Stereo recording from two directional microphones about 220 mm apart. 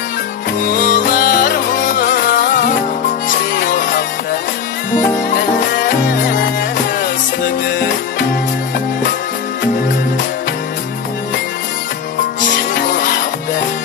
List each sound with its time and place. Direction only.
0.7 s music: 40° left (ahead or behind)